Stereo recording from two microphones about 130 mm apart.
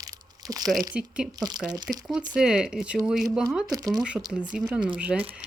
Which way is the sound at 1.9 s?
Centre (ahead or behind).